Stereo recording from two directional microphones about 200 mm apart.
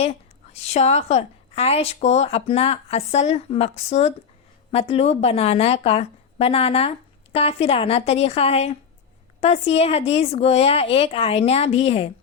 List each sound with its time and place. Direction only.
0.6 s a woman's voice: 35° left (ahead or behind)